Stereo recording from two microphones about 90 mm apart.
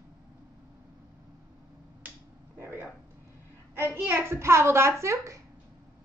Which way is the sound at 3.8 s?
25° right (ahead or behind).